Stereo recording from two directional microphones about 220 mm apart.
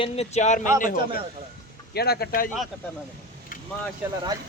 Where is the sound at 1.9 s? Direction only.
45° left (ahead or behind).